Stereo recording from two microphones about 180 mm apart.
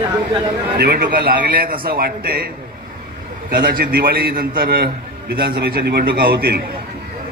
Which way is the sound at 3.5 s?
55° right (ahead or behind).